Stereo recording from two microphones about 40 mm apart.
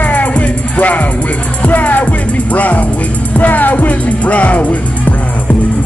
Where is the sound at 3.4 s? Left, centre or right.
Left.